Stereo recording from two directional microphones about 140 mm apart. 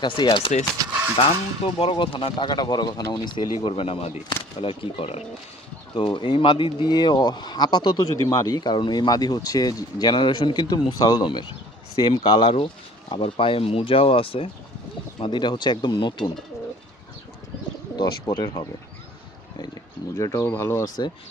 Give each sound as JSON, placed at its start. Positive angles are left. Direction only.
{"t": 0.0, "sound": "speech", "side_deg": 35}
{"t": 0.8, "sound": "speech", "side_deg": -25}
{"t": 1.6, "sound": "speech", "side_deg": 40}
{"t": 17.9, "sound": "speech", "side_deg": 30}
{"t": 20.1, "sound": "speech", "side_deg": 25}